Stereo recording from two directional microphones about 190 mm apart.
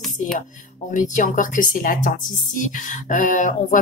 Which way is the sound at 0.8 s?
40° left (ahead or behind).